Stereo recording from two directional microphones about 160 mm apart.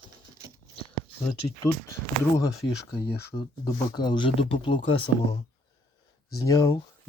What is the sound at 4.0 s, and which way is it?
Speech, 30° left (ahead or behind).